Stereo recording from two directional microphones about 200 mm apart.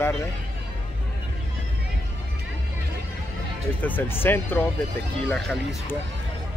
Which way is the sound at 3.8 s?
10° left (ahead or behind).